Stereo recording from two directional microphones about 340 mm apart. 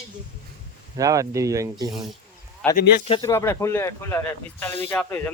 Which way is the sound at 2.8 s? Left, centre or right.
Left.